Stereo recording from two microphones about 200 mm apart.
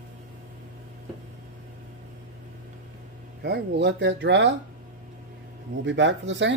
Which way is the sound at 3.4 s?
60° right (ahead or behind).